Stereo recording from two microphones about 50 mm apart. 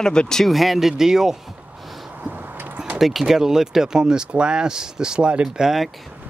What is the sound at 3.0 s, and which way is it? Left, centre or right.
Speech, centre.